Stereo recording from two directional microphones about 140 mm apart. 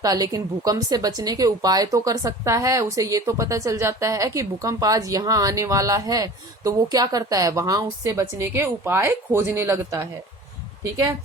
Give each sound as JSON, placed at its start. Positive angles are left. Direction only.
{"t": 0.0, "sound": "speech", "side_deg": -25}